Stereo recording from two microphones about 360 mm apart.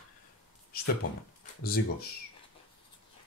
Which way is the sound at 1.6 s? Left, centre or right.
Left.